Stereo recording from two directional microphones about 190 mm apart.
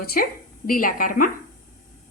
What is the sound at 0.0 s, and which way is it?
A woman's voice, 50° left (ahead or behind).